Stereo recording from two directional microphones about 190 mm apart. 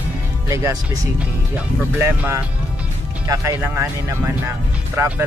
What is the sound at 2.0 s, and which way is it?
Speech, 15° right (ahead or behind).